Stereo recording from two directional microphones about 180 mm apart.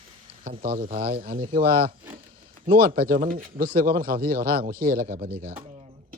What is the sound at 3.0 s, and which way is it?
Speech, 55° right (ahead or behind).